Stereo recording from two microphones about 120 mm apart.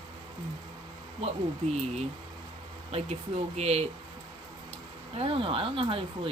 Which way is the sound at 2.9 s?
55° right (ahead or behind).